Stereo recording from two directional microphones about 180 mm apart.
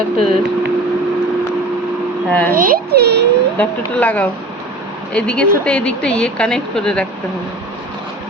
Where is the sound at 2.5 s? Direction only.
50° right (ahead or behind).